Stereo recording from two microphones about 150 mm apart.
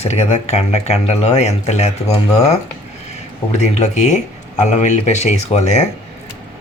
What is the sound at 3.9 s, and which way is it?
Speech, 55° left (ahead or behind).